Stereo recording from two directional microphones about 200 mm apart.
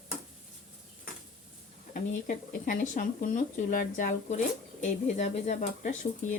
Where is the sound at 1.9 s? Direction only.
40° left (ahead or behind).